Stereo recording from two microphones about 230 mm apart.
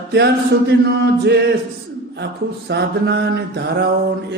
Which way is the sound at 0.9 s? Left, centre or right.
Right.